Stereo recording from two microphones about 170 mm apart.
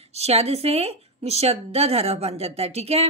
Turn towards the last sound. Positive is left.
turn(degrees=-35)  # may be behind; listen again after turning